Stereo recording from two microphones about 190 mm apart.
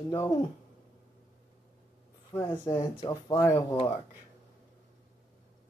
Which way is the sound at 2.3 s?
20° left (ahead or behind).